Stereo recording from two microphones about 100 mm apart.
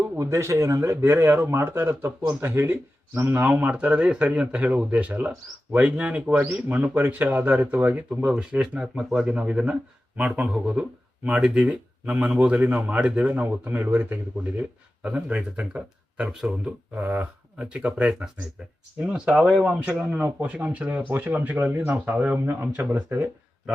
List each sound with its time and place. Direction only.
0.2 s a man's voice: 30° right (ahead or behind); by 16.7 s 5° right (ahead or behind)
16.9 s a man's voice: 15° right (ahead or behind)